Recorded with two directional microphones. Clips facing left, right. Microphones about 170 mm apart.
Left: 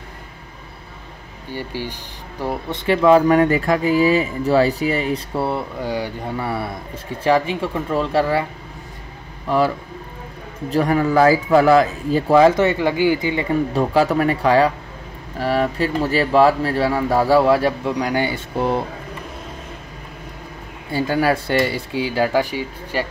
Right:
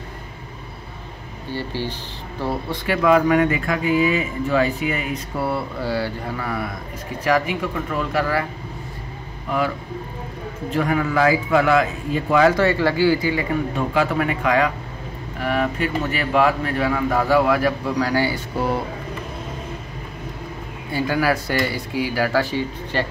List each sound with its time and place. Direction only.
1.5 s speech: 15° left (ahead or behind)
2.8 s speech: 30° left (ahead or behind)
10.7 s speech: 35° left (ahead or behind)
13.7 s speech: 35° left (ahead or behind)
20.9 s speech: 30° left (ahead or behind); by 23.0 s 10° left (ahead or behind)